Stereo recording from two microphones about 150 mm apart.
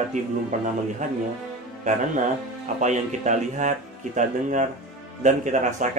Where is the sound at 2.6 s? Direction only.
55° right (ahead or behind).